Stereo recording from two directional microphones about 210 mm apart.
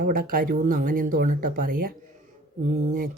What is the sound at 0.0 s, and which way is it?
Speech, 40° right (ahead or behind).